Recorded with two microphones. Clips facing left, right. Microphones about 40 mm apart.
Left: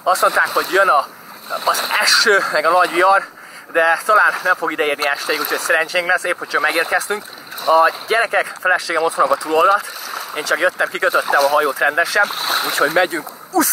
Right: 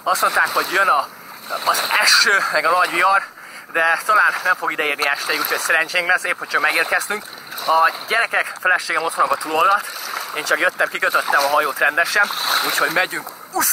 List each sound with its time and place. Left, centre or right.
0.0 s speech: centre
8.3 s speech: centre
8.9 s speech: centre
11.3 s speech: centre
11.6 s speech: centre